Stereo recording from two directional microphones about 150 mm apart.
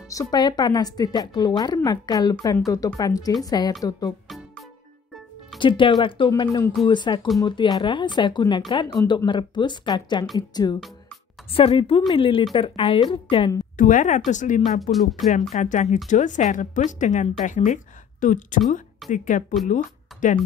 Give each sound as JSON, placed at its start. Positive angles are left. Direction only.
{"t": 0.1, "sound": "a woman's voice", "side_deg": 25}
{"t": 4.3, "sound": "music", "side_deg": 0}
{"t": 5.6, "sound": "a woman's voice", "side_deg": 35}
{"t": 11.5, "sound": "speech", "side_deg": 40}
{"t": 13.7, "sound": "speech", "side_deg": 60}
{"t": 14.8, "sound": "speech", "side_deg": 0}
{"t": 15.5, "sound": "speech", "side_deg": 55}